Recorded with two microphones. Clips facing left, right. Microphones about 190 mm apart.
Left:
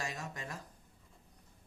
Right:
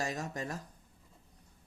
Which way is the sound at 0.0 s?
40° right (ahead or behind).